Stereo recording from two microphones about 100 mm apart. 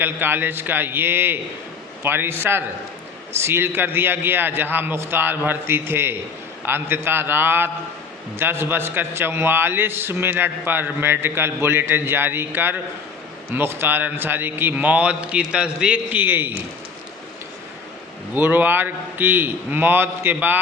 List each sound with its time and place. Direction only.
0.0 s a man's voice: 20° right (ahead or behind)
18.3 s a man's voice: 20° right (ahead or behind)